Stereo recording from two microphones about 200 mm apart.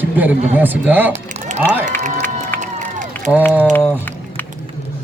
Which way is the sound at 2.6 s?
40° right (ahead or behind).